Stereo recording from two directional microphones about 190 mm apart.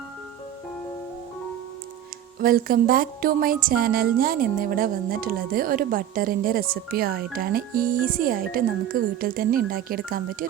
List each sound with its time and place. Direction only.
2.4 s a woman's voice: 50° right (ahead or behind)